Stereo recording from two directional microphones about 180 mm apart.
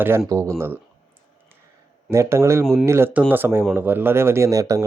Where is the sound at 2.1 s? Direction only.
15° right (ahead or behind).